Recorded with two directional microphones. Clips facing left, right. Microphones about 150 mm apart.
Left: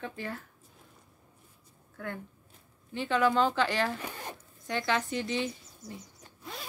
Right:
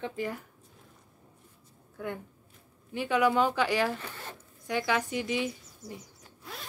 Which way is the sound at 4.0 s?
15° left (ahead or behind).